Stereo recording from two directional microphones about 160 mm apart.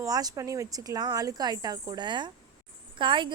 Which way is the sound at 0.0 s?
20° right (ahead or behind).